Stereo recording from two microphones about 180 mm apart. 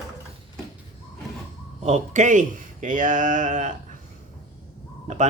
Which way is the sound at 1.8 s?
40° right (ahead or behind).